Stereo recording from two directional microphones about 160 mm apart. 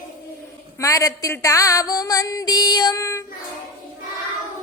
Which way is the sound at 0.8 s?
20° left (ahead or behind).